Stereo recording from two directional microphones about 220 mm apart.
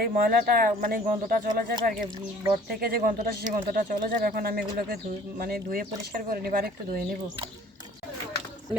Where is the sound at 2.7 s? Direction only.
45° right (ahead or behind).